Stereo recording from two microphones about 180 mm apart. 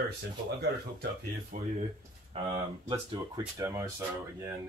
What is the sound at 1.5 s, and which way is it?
Speech, 45° right (ahead or behind).